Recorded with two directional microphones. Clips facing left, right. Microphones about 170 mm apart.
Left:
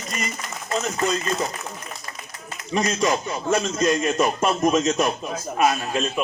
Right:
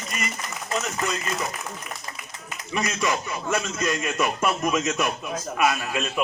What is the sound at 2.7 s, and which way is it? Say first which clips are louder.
A man's voice: left 4 dB; 30° left (ahead or behind).